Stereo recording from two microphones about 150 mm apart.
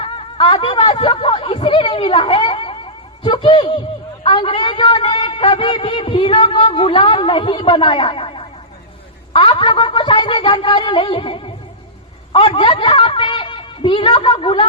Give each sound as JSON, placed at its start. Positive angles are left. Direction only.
{"t": 0.0, "sound": "a man's voice", "side_deg": 35}